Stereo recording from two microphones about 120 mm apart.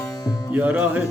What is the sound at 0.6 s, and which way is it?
Music, 10° right (ahead or behind).